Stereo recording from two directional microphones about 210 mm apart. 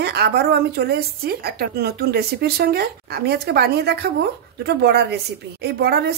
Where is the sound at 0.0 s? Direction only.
50° right (ahead or behind).